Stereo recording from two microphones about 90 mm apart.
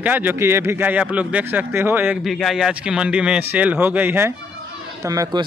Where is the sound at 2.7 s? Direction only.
10° right (ahead or behind).